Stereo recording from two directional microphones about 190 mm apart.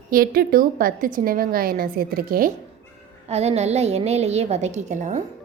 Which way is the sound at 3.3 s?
35° right (ahead or behind).